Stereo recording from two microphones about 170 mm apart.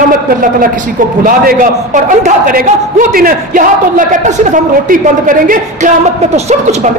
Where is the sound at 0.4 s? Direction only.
55° right (ahead or behind).